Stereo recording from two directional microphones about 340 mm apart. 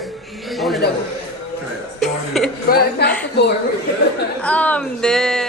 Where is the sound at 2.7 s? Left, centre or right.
Left.